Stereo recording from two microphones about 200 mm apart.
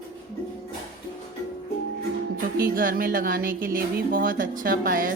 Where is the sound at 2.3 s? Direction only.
45° right (ahead or behind).